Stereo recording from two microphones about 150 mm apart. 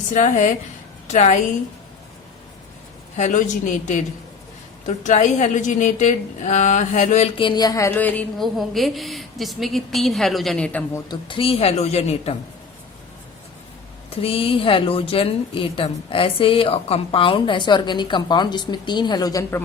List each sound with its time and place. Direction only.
0.1 s a woman's voice: 55° left (ahead or behind)
3.2 s a woman's voice: 55° left (ahead or behind)
7.3 s a woman's voice: 30° left (ahead or behind); by 11.0 s 10° left (ahead or behind)
11.1 s a woman's voice: 35° left (ahead or behind)
14.2 s a woman's voice: 40° left (ahead or behind); by 19.6 s 20° left (ahead or behind)